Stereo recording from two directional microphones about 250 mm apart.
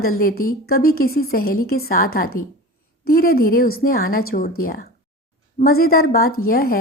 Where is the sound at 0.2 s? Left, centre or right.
Left.